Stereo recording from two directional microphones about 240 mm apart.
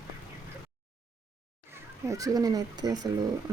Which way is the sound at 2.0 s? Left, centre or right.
Centre.